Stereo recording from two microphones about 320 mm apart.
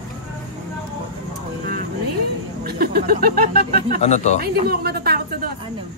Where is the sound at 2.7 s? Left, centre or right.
Right.